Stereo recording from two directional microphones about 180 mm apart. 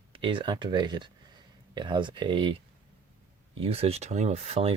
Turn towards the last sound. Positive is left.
turn(degrees=-35)  # may be behind; listen again after turning